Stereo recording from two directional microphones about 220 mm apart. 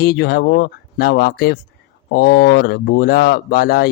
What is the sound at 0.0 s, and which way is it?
Speech, 45° left (ahead or behind).